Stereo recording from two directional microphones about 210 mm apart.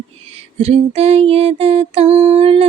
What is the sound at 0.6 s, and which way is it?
Female singing, 30° right (ahead or behind).